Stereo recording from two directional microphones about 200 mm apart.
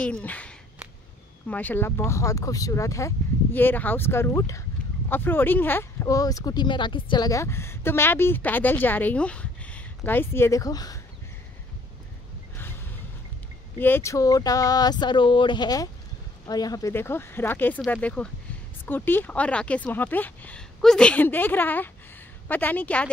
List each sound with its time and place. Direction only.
0.0 s speech: 5° left (ahead or behind)
13.7 s speech: 10° left (ahead or behind)